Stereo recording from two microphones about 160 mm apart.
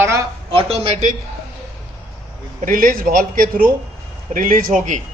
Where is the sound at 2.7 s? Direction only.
65° right (ahead or behind).